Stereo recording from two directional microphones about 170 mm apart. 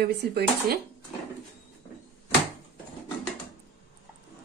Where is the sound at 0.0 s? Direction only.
70° right (ahead or behind).